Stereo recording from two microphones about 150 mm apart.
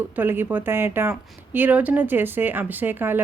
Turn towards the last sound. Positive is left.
turn(degrees=-15)  # may be behind; listen again after turning